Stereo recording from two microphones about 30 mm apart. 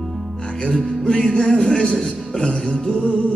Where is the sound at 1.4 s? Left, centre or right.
Centre.